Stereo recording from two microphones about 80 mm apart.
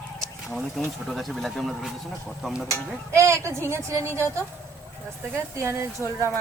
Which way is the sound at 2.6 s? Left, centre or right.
Right.